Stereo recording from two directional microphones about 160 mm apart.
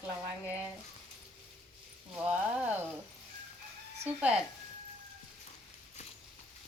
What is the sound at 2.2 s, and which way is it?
Speech, 10° right (ahead or behind).